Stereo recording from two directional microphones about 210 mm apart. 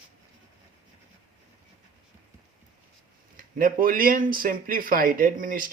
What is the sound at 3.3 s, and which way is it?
Speech, 40° right (ahead or behind).